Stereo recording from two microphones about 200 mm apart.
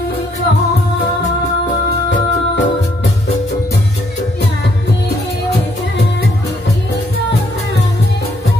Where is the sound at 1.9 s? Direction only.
60° left (ahead or behind).